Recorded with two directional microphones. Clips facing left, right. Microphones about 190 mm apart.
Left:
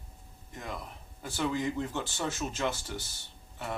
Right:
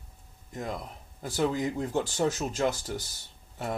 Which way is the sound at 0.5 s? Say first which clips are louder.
Right 5 dB; 40° right (ahead or behind).